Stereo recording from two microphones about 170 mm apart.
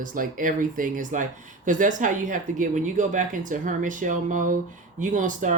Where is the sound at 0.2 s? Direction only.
50° right (ahead or behind).